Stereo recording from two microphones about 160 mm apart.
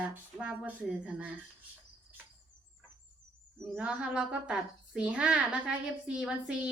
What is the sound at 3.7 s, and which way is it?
A woman's voice, 10° right (ahead or behind).